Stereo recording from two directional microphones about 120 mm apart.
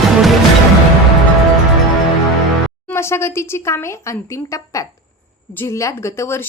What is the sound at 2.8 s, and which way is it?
Speech, 20° left (ahead or behind).